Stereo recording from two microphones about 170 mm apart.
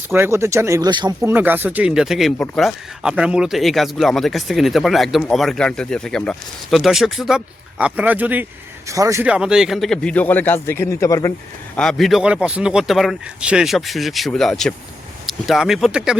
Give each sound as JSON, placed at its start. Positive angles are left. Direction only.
{"t": 0.1, "sound": "speech", "side_deg": -15}
{"t": 1.3, "sound": "speech", "side_deg": -10}
{"t": 9.2, "sound": "speech", "side_deg": -5}
{"t": 11.8, "sound": "speech", "side_deg": 0}